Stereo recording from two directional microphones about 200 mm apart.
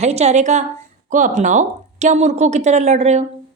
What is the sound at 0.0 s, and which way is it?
A woman's voice, 35° right (ahead or behind).